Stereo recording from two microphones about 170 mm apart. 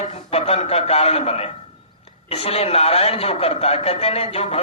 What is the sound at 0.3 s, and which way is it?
A man's voice, 40° left (ahead or behind).